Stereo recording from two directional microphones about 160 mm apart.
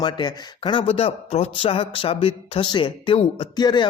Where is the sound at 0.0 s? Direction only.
30° left (ahead or behind).